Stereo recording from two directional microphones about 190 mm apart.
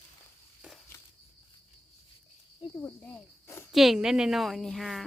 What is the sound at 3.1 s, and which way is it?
Cricket, 15° left (ahead or behind).